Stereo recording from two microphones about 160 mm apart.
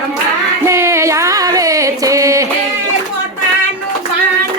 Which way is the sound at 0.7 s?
15° right (ahead or behind).